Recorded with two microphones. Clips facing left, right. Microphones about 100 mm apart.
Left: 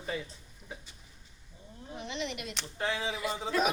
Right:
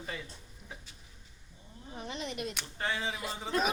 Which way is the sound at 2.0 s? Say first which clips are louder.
Left 1 dB; 40° right (ahead or behind).